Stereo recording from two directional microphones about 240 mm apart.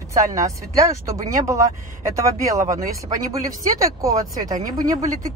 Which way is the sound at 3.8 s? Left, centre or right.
Centre.